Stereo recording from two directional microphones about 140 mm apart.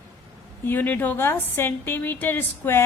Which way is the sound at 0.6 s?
15° left (ahead or behind).